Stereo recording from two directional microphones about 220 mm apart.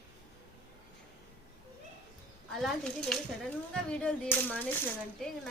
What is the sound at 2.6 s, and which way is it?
A child's voice, 5° left (ahead or behind).